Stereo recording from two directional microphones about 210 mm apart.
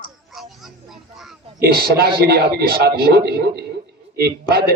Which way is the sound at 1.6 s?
45° right (ahead or behind).